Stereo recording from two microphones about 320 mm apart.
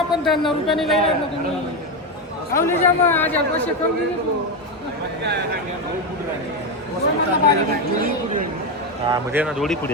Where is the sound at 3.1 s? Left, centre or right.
Centre.